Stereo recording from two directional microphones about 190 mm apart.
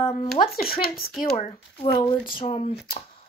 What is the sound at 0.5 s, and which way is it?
Speech, 50° left (ahead or behind).